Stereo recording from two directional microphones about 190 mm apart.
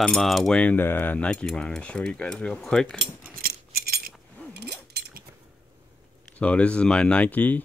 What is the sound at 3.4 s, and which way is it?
Keys jangling, 50° right (ahead or behind).